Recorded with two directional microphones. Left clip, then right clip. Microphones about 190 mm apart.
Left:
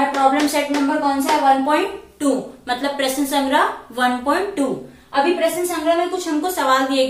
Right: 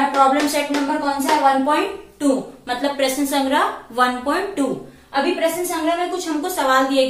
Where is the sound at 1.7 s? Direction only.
15° left (ahead or behind).